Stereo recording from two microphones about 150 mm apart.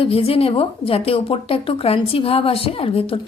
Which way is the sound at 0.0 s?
40° left (ahead or behind).